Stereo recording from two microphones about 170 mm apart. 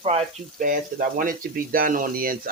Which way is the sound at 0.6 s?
55° right (ahead or behind).